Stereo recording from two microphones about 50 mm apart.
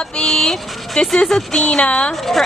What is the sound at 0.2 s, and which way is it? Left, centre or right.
A woman's voice, centre.